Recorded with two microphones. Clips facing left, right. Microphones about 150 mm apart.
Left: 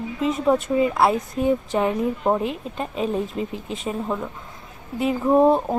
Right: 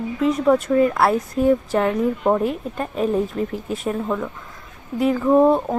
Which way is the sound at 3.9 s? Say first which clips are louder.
Right 2 dB; 10° left (ahead or behind).